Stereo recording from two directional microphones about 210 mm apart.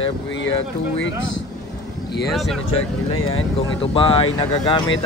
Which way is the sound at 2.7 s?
75° left (ahead or behind).